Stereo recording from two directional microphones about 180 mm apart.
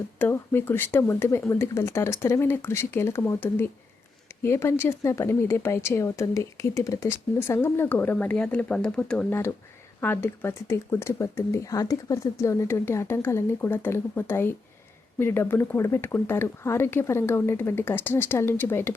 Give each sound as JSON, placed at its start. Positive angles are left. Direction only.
{"t": 0.2, "sound": "speech", "side_deg": 10}